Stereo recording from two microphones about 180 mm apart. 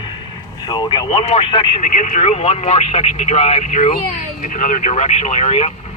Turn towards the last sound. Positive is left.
turn(degrees=35)  # may be behind; listen again after turning